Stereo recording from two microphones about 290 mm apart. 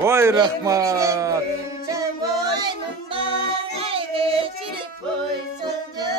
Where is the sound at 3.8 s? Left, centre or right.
Centre.